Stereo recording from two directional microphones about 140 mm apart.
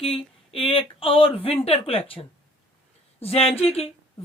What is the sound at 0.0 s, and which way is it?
Speech, 40° left (ahead or behind).